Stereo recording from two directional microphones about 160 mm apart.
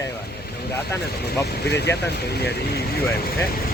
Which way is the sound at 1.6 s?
90° left.